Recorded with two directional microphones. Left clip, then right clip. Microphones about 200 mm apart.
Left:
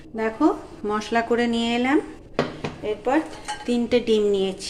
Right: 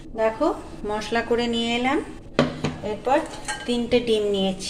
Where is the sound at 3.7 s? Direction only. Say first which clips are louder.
Left 1 dB; 25° left (ahead or behind).